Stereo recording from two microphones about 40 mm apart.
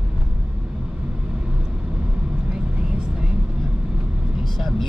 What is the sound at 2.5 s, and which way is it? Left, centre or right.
Vehicle, right.